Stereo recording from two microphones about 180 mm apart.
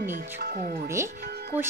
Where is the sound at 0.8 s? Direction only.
15° right (ahead or behind).